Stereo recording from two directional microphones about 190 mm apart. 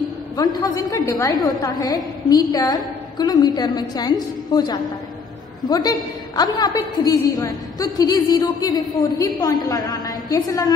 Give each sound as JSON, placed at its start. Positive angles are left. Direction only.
{"t": 0.4, "sound": "a woman's voice", "side_deg": 20}